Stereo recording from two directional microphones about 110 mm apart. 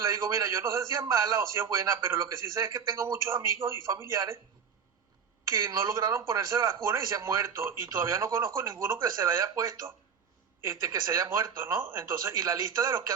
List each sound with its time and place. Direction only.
0.0 s a man's voice: 25° right (ahead or behind)
5.5 s a man's voice: 25° right (ahead or behind)